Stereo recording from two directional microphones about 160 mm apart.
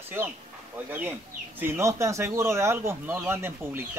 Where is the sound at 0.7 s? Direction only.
10° right (ahead or behind).